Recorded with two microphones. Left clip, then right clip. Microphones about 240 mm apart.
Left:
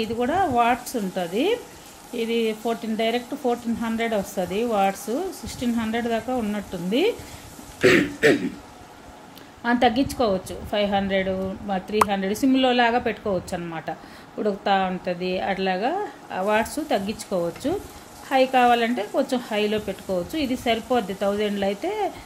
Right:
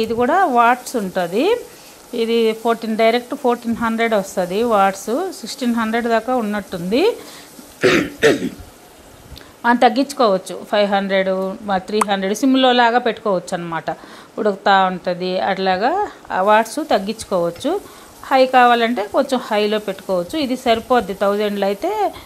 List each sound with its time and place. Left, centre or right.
0.0 s speech: right
9.6 s speech: right